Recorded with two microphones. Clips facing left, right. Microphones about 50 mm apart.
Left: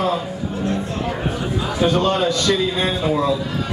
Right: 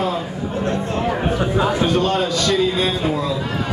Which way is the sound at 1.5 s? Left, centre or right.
Right.